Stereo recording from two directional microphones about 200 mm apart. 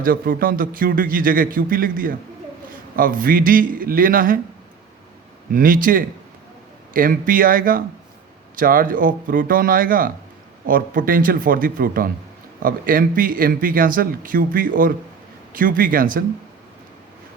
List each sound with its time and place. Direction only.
0.0 s speech: 45° right (ahead or behind)
5.5 s speech: 45° right (ahead or behind)